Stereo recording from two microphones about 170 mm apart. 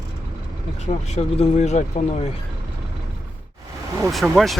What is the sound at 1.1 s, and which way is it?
Speech, 40° left (ahead or behind).